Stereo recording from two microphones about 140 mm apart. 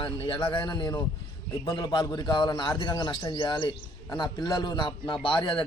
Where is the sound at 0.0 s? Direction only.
35° left (ahead or behind).